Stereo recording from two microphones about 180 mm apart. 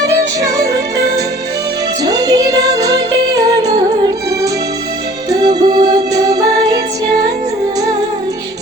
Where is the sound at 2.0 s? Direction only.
20° right (ahead or behind).